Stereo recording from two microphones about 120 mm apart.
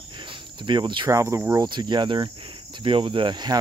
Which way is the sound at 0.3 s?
40° right (ahead or behind).